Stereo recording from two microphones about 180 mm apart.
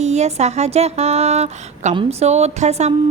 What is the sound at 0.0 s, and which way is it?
Speech, 40° right (ahead or behind).